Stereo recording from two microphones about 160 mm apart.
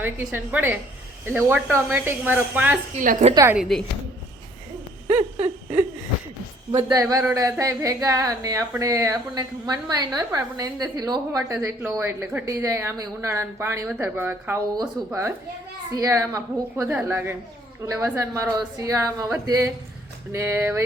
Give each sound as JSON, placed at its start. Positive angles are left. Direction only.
{"t": 0.0, "sound": "a woman's voice", "side_deg": -10}
{"t": 3.0, "sound": "a woman's voice", "side_deg": -55}
{"t": 3.5, "sound": "a woman's voice", "side_deg": 0}
{"t": 6.7, "sound": "speech", "side_deg": -25}
{"t": 11.8, "sound": "a woman's voice", "side_deg": -10}